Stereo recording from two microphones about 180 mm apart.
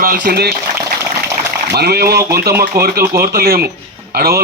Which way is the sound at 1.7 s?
60° right (ahead or behind).